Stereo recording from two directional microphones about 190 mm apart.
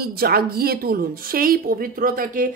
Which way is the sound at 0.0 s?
55° right (ahead or behind).